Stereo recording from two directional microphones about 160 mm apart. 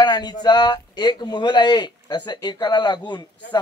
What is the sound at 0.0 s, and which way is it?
Speech, 25° left (ahead or behind).